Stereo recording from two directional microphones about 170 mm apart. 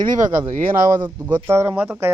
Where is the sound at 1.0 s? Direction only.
10° right (ahead or behind).